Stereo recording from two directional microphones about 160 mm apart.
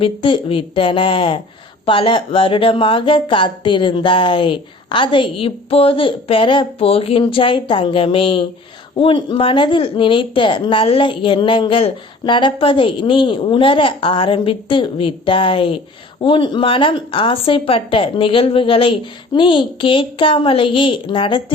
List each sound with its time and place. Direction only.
0.0 s speech: 35° left (ahead or behind)